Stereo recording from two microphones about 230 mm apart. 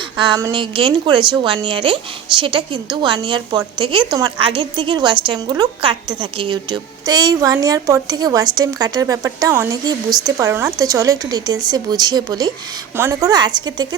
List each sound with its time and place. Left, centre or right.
0.2 s a woman's voice: centre